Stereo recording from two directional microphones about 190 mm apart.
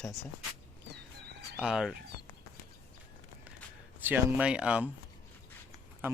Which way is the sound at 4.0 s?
10° right (ahead or behind).